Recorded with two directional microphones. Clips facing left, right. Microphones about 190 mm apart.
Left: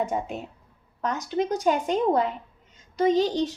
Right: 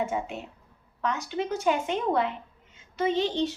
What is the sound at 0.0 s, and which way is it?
A woman's voice, 35° left (ahead or behind).